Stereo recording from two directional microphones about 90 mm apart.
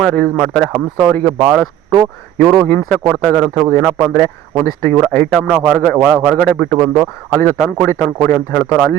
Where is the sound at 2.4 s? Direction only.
30° right (ahead or behind).